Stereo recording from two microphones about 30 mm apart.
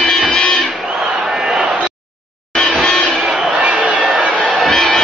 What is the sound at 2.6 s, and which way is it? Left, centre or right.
Music, left.